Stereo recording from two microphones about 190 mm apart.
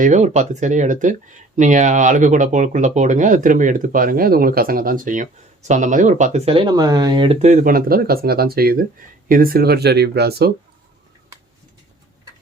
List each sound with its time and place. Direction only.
0.0 s speech: 40° right (ahead or behind); by 10.5 s 55° right (ahead or behind)